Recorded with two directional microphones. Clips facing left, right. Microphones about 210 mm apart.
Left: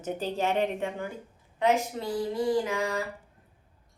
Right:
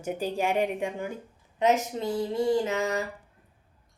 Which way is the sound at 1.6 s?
20° right (ahead or behind).